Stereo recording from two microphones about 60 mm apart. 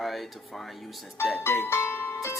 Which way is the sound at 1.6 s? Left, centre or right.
Left.